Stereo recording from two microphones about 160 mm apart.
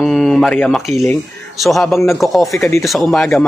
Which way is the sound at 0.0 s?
5° left (ahead or behind).